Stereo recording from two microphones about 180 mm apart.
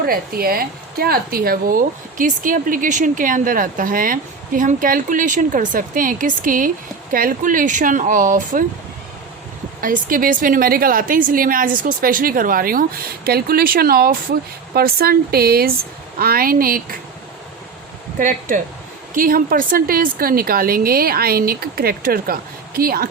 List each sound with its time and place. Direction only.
0.0 s a woman's voice: 55° right (ahead or behind)
9.8 s a woman's voice: 50° right (ahead or behind)
18.2 s a woman's voice: 45° right (ahead or behind)